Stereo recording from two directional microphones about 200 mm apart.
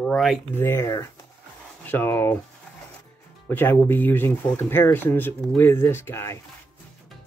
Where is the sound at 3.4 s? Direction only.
10° left (ahead or behind).